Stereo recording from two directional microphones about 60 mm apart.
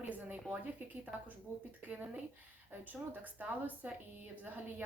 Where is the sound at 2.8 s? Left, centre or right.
Right.